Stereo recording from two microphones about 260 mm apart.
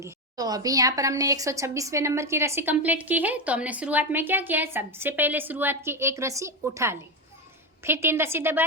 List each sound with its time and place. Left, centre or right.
0.0 s a woman's voice: centre